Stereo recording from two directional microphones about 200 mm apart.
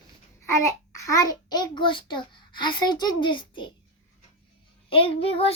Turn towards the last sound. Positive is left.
turn(degrees=25)  # may be behind; listen again after turning